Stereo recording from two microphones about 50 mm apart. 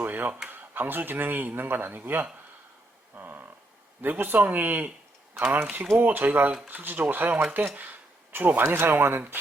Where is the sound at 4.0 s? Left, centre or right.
Right.